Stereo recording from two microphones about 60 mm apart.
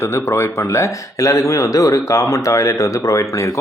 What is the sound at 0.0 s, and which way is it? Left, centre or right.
Speech, left.